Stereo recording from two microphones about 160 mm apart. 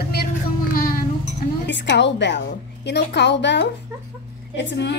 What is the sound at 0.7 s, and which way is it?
Music, 65° left (ahead or behind).